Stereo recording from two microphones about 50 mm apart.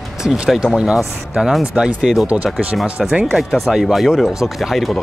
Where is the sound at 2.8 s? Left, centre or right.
Centre.